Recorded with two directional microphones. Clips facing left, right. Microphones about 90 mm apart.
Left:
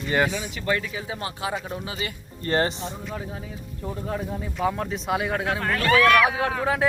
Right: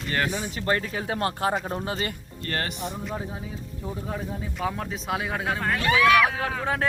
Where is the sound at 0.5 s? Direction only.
40° right (ahead or behind).